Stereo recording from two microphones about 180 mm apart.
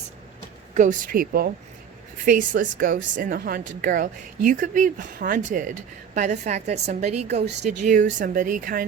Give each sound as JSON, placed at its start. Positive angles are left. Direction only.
{"t": 0.7, "sound": "speech", "side_deg": -45}
{"t": 2.7, "sound": "a woman's voice", "side_deg": -50}